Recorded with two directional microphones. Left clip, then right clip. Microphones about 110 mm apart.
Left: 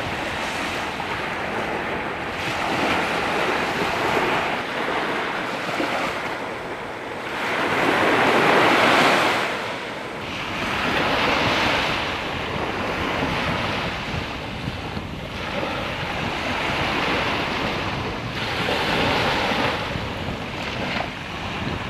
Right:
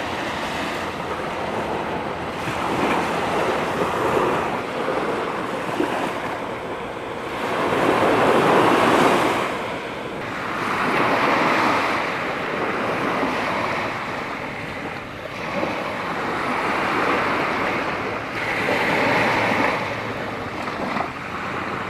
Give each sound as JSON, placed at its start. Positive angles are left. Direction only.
{"t": 7.8, "sound": "vehicle", "side_deg": 20}
{"t": 8.3, "sound": "waves", "side_deg": 20}
{"t": 10.9, "sound": "waves", "side_deg": 20}
{"t": 18.7, "sound": "waves", "side_deg": 15}